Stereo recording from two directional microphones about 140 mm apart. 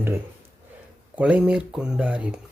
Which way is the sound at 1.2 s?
10° right (ahead or behind).